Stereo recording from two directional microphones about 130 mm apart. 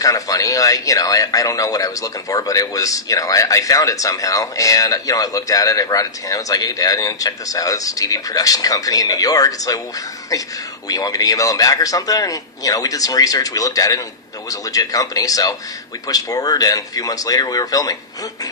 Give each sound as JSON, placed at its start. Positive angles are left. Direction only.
{"t": 0.0, "sound": "a man's voice", "side_deg": 25}
{"t": 10.8, "sound": "a man's voice", "side_deg": 25}